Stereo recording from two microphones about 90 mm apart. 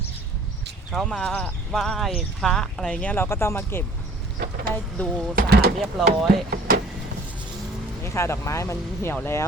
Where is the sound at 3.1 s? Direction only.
25° left (ahead or behind).